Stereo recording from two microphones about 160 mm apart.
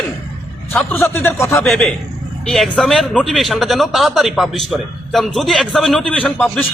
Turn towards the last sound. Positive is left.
turn(degrees=10)  # may be behind; listen again after turning